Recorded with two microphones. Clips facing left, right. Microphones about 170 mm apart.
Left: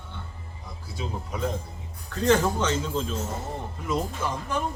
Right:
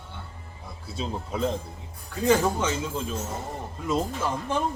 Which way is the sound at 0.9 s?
25° right (ahead or behind).